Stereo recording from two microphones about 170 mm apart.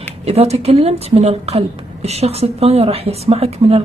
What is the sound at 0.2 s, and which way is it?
Speech, 35° right (ahead or behind).